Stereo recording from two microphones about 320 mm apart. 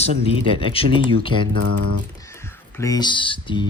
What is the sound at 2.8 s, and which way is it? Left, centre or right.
Speech, centre.